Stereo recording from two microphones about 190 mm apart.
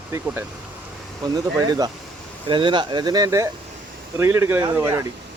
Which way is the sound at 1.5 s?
20° right (ahead or behind).